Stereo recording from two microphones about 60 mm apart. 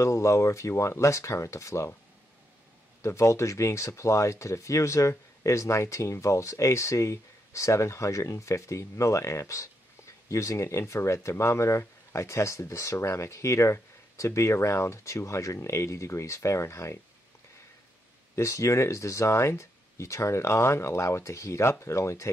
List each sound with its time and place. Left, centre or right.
0.0 s speech: left
3.0 s speech: left
18.3 s speech: left